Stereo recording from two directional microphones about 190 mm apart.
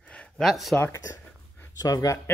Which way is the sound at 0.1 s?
5° left (ahead or behind).